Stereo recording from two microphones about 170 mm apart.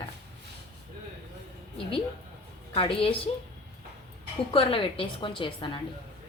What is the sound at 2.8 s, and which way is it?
Speech, 30° left (ahead or behind).